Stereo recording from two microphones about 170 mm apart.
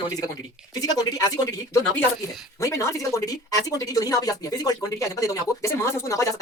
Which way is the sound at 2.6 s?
20° left (ahead or behind).